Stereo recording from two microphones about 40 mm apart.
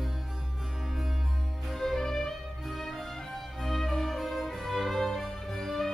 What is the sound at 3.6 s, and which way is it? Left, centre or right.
Music, centre.